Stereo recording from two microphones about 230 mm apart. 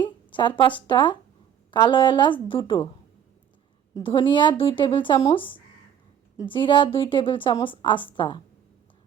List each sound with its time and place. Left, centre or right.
0.3 s a woman's voice: left
3.9 s a woman's voice: left